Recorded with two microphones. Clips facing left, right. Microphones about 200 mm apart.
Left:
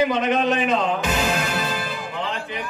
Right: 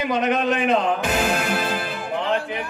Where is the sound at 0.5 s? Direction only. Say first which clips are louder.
Right 1 dB; 55° right (ahead or behind).